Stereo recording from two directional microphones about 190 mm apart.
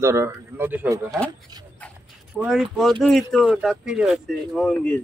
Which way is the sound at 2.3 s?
Centre (ahead or behind).